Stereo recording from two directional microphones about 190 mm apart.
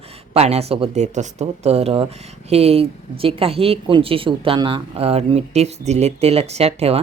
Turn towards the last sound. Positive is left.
turn(degrees=-30)  # may be behind; listen again after turning